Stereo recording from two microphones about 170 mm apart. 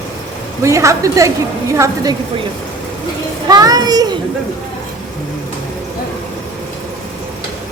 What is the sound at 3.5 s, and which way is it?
Speech, 20° right (ahead or behind).